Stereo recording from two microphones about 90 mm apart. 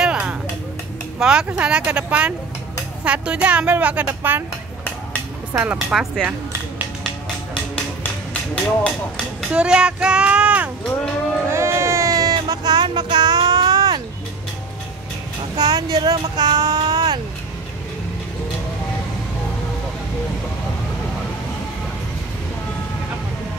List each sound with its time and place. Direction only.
0.0 s a sound: 10° right (ahead or behind)
1.2 s a woman's voice: 10° right (ahead or behind)
5.5 s a woman's voice: 15° right (ahead or behind)
5.9 s a woman's voice: 5° right (ahead or behind)
9.5 s speech: 10° right (ahead or behind)
11.4 s a sound: 30° right (ahead or behind); by 14.0 s 50° right (ahead or behind)
15.5 s speech: 50° right (ahead or behind)